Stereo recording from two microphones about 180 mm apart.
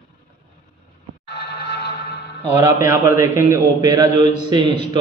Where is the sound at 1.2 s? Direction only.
65° left (ahead or behind).